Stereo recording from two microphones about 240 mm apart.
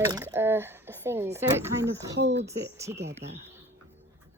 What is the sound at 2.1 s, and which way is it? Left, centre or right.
Speech, right.